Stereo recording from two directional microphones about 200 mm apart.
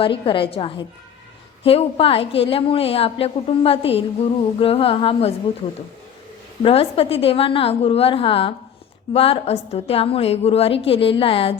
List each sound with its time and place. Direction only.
0.0 s a woman's voice: 25° left (ahead or behind)
6.6 s a woman's voice: 30° left (ahead or behind)